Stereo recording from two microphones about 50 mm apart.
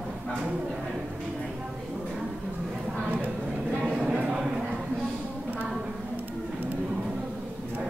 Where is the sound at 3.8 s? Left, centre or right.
Right.